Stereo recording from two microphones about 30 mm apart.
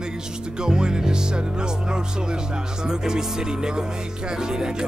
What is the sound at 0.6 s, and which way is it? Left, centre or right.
Music, right.